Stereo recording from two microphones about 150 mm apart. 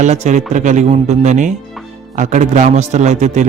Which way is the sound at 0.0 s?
50° right (ahead or behind).